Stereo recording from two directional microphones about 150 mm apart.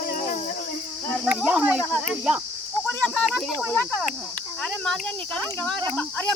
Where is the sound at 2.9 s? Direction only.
5° left (ahead or behind).